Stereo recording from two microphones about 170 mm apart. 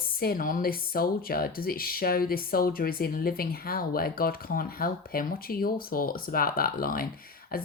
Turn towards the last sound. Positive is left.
turn(degrees=60)  # may be behind; listen again after turning